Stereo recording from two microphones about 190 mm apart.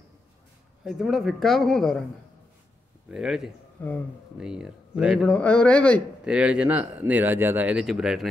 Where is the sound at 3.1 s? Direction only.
Centre (ahead or behind).